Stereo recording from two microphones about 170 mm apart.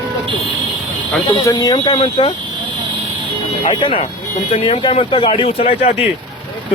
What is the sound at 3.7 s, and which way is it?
Speech, 30° left (ahead or behind).